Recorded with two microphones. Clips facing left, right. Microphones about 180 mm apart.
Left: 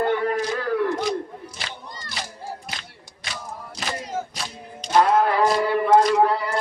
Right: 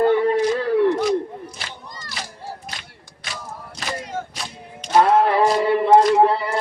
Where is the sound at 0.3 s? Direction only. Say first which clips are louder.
Right 5 dB; 25° right (ahead or behind).